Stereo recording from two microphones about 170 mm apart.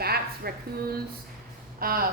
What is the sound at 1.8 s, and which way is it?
Speech, 60° right (ahead or behind).